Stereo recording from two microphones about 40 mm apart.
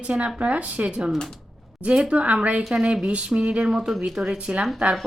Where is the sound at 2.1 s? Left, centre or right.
Right; by 4.3 s centre.